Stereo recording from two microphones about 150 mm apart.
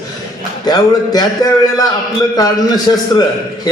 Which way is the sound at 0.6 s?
25° left (ahead or behind).